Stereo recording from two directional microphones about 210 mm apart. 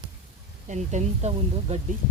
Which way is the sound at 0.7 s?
35° right (ahead or behind).